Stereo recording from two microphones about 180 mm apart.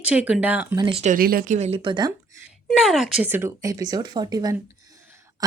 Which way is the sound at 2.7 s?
Centre (ahead or behind).